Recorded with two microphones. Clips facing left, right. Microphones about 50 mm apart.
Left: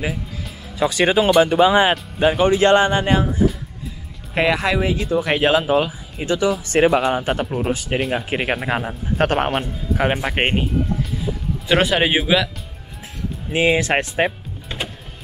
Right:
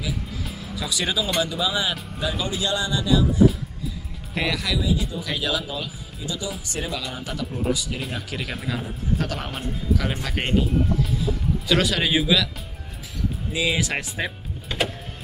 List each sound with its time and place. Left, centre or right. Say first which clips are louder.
0.7 s speech: left 10 dB; left
5.2 s speech: left 10 dB; left
11.1 s speech: even; left
13.5 s speech: left 8 dB; left